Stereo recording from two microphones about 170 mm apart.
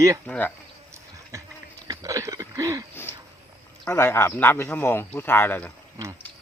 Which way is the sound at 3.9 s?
15° left (ahead or behind).